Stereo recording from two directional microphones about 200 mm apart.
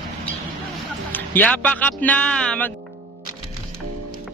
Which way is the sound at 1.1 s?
10° left (ahead or behind).